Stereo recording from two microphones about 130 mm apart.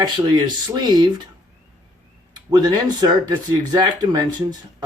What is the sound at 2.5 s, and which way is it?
Speech, 30° right (ahead or behind).